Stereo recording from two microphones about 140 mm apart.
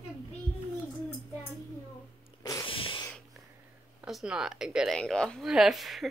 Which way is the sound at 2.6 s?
40° left (ahead or behind).